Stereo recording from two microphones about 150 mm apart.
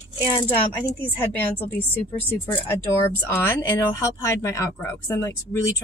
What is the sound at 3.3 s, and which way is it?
Speech, 15° left (ahead or behind).